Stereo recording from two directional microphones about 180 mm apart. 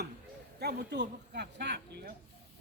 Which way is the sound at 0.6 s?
60° right (ahead or behind).